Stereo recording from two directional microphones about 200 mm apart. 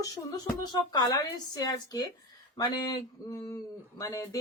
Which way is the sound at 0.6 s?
20° left (ahead or behind).